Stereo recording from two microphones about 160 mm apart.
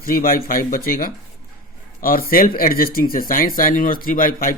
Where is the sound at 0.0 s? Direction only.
65° left (ahead or behind).